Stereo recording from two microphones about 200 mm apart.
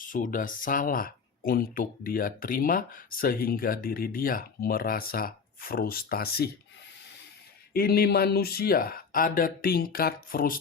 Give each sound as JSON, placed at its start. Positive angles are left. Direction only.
{"t": 0.0, "sound": "speech", "side_deg": 40}
{"t": 7.7, "sound": "speech", "side_deg": 50}